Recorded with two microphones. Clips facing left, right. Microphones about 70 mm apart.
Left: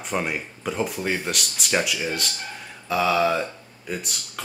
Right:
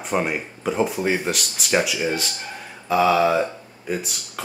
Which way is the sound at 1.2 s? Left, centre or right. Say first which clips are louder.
Right 3 dB; centre.